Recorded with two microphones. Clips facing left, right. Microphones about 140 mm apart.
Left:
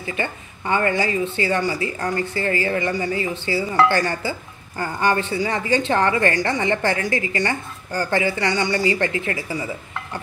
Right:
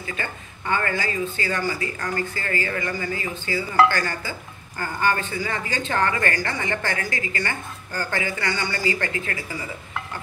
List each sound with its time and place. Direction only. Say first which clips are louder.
0.0 s a woman's voice: left 5 dB; 20° left (ahead or behind)